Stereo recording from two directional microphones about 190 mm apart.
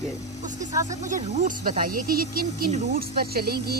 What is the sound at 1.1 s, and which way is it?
Speech, 45° right (ahead or behind).